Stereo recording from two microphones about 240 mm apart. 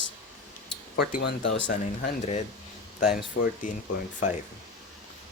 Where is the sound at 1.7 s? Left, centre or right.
Left.